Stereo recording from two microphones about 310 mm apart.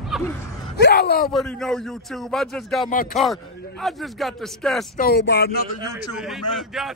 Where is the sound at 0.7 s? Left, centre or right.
Left.